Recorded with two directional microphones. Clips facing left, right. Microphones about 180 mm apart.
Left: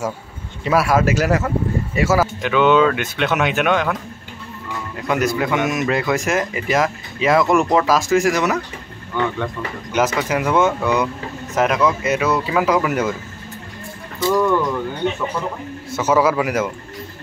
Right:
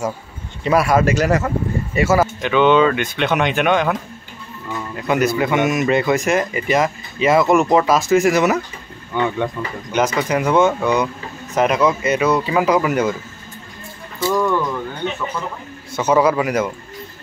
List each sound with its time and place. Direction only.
0.7 s speech: centre (ahead or behind)
9.1 s speech: 20° right (ahead or behind)
9.9 s speech: 5° left (ahead or behind)
14.2 s speech: centre (ahead or behind)
15.9 s speech: 5° left (ahead or behind)